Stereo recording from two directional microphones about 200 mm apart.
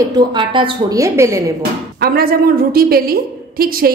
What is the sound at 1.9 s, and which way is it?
A woman's voice, 50° right (ahead or behind).